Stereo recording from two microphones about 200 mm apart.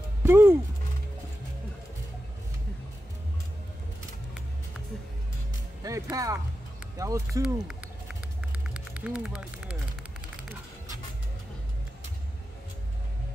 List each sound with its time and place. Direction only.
0.2 s music: 10° right (ahead or behind)
5.8 s music: 15° right (ahead or behind)
6.1 s speech: 15° right (ahead or behind)
8.5 s vehicle: 5° right (ahead or behind)